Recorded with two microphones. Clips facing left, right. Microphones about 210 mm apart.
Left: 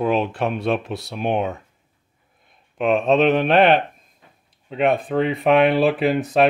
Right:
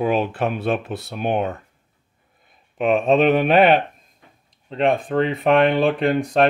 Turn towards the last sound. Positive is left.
turn(degrees=5)  # may be behind; listen again after turning